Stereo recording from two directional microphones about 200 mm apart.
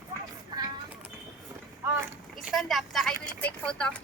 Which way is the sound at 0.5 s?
20° right (ahead or behind).